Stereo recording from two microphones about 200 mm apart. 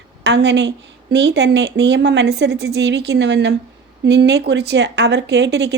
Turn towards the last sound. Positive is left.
turn(degrees=-60)  # may be behind; listen again after turning